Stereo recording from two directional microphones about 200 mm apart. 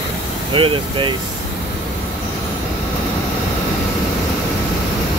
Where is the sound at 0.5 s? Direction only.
25° right (ahead or behind).